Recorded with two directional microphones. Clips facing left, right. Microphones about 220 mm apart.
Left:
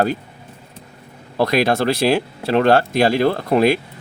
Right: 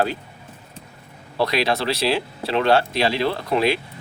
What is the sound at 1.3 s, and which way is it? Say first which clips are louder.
Speech: left 4 dB; 50° left (ahead or behind).